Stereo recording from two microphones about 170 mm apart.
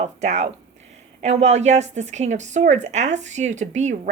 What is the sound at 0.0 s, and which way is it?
A woman's voice, 45° right (ahead or behind).